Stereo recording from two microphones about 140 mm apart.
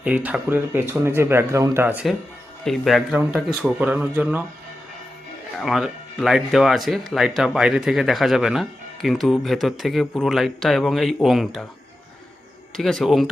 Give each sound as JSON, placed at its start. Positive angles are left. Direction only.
{"t": 0.0, "sound": "speech", "side_deg": -10}
{"t": 2.6, "sound": "speech", "side_deg": 0}
{"t": 5.5, "sound": "speech", "side_deg": 0}
{"t": 12.7, "sound": "speech", "side_deg": 5}